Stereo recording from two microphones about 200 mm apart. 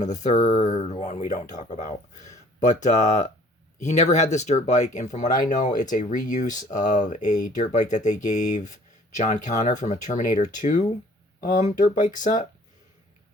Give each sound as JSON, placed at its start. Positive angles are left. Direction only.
{"t": 0.0, "sound": "speech", "side_deg": 35}